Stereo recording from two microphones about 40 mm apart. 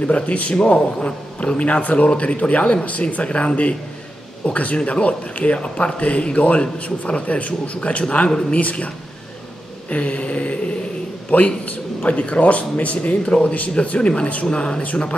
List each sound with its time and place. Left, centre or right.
0.0 s speech: left
8.3 s speech: centre
8.5 s a man's voice: left
13.2 s speech: left